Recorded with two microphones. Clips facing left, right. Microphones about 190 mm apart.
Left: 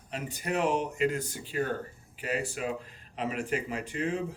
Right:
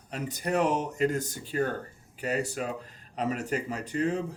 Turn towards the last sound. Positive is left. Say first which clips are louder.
# right 3 dB
turn(degrees=-40)  # may be behind; listen again after turning